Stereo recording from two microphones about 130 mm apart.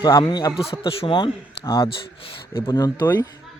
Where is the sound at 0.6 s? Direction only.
50° left (ahead or behind).